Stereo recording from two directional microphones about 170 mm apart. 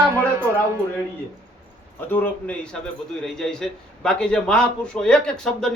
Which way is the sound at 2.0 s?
10° left (ahead or behind).